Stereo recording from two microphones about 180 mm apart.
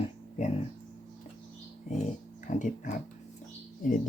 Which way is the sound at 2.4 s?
45° left (ahead or behind).